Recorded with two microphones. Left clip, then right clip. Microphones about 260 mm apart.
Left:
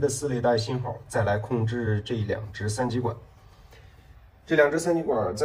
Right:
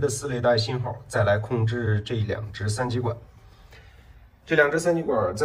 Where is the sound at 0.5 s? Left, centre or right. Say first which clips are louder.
Right 3 dB; left.